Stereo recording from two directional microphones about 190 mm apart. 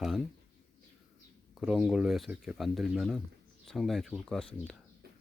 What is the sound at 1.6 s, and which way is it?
Speech, 5° right (ahead or behind).